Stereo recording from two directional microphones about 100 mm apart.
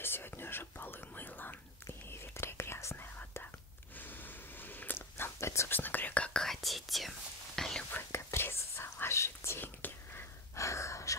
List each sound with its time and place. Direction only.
0.0 s whispering: 20° left (ahead or behind); by 7.8 s 5° left (ahead or behind)
7.9 s whispering: 25° left (ahead or behind)
10.5 s gasp: 30° left (ahead or behind)